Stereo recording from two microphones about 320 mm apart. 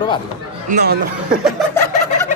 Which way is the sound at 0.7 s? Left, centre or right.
Right.